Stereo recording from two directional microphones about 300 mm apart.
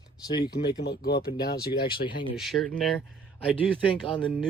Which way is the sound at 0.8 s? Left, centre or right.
Left.